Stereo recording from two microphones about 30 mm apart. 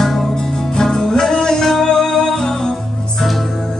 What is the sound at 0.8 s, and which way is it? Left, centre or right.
Music, centre.